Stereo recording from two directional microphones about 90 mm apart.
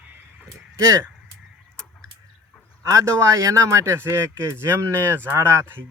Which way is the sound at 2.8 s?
35° right (ahead or behind).